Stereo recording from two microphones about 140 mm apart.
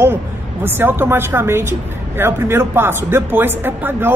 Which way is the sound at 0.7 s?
15° right (ahead or behind).